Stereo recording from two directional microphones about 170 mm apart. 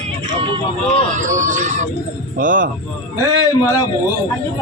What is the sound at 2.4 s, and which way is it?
Speech, 50° right (ahead or behind).